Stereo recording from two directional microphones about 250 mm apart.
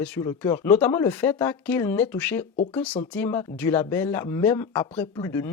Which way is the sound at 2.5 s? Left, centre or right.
Left.